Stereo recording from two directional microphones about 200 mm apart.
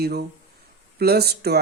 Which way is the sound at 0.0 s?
50° right (ahead or behind).